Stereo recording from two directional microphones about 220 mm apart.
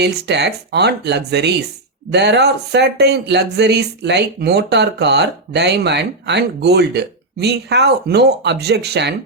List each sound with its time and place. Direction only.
0.0 s speech: 50° right (ahead or behind)